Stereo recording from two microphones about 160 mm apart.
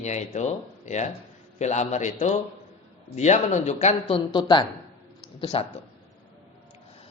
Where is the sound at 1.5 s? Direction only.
45° left (ahead or behind).